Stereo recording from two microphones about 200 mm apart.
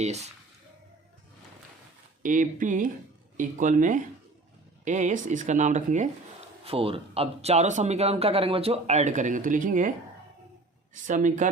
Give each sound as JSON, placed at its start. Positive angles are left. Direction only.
{"t": 0.0, "sound": "a man's voice", "side_deg": -35}
{"t": 2.2, "sound": "a man's voice", "side_deg": -40}
{"t": 11.0, "sound": "a man's voice", "side_deg": -40}